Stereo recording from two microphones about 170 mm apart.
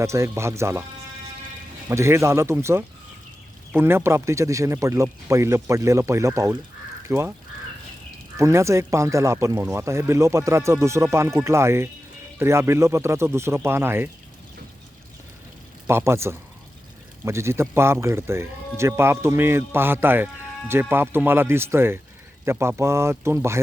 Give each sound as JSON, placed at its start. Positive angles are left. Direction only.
{"t": 0.0, "sound": "speech", "side_deg": -15}
{"t": 1.9, "sound": "speech", "side_deg": -15}
{"t": 8.4, "sound": "speech", "side_deg": -15}
{"t": 15.9, "sound": "speech", "side_deg": -15}